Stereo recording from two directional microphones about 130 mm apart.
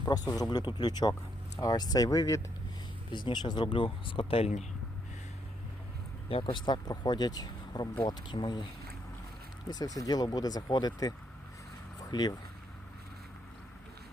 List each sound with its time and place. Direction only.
0.0 s speech: 30° left (ahead or behind)
3.1 s speech: 35° left (ahead or behind); by 4.6 s 50° left (ahead or behind)
6.2 s speech: 40° left (ahead or behind)
9.6 s speech: 30° left (ahead or behind)
12.1 s speech: 30° left (ahead or behind)